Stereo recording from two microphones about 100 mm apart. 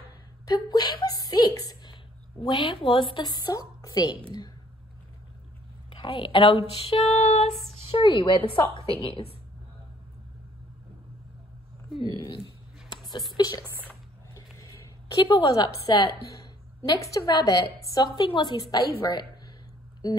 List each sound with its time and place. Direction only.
0.5 s a sound: 45° left (ahead or behind)
2.4 s a woman's voice: 55° left (ahead or behind)
5.9 s a woman's voice: 60° left (ahead or behind)
6.7 s female singing: 65° left (ahead or behind); by 7.4 s 90° left
7.6 s a woman's voice: 70° left (ahead or behind)
12.0 s speech: 60° left (ahead or behind)
13.4 s a woman's voice: 45° left (ahead or behind)
14.3 s a sound: 35° left (ahead or behind)
15.1 s speech: 55° left (ahead or behind)
15.5 s a woman's voice: 40° left (ahead or behind)
16.8 s a woman's voice: 40° left (ahead or behind)